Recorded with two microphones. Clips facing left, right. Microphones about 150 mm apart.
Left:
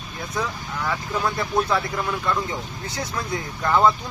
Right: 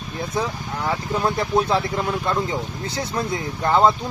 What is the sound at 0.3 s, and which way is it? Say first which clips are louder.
Speech: right 2 dB; 30° right (ahead or behind).